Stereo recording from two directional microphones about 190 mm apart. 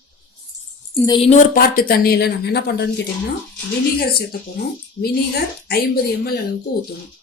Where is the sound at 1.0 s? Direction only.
25° left (ahead or behind).